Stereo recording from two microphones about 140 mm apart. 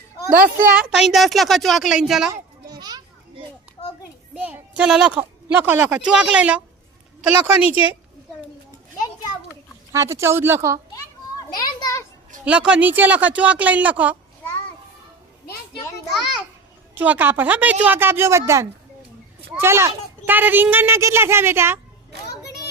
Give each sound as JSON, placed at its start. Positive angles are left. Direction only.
{"t": 0.3, "sound": "a child's voice", "side_deg": -80}
{"t": 0.7, "sound": "a woman's voice", "side_deg": -5}
{"t": 2.3, "sound": "children playing", "side_deg": -30}
{"t": 4.4, "sound": "speech", "side_deg": -10}
{"t": 7.6, "sound": "a woman's voice", "side_deg": 45}
{"t": 9.9, "sound": "speech", "side_deg": -20}
{"t": 11.3, "sound": "children playing", "side_deg": 25}
{"t": 12.5, "sound": "speech", "side_deg": -10}
{"t": 16.9, "sound": "speech", "side_deg": -10}